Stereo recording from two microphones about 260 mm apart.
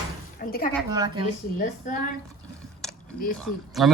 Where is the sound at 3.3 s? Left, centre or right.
Centre.